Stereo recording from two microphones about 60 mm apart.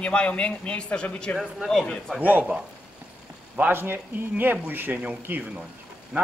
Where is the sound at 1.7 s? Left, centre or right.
Centre.